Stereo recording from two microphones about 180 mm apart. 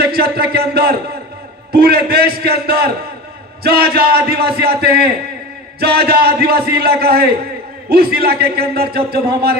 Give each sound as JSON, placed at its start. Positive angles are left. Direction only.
{"t": 0.0, "sound": "a man's voice", "side_deg": -60}